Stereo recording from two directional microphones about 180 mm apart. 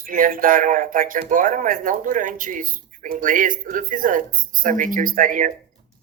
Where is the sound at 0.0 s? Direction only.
50° right (ahead or behind).